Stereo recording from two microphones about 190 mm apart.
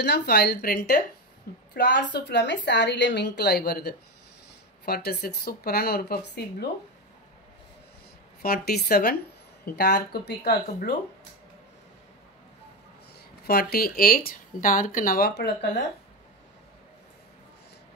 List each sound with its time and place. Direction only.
0.0 s a woman's voice: 55° left (ahead or behind)
8.4 s a woman's voice: 55° left (ahead or behind)
13.5 s speech: 55° left (ahead or behind)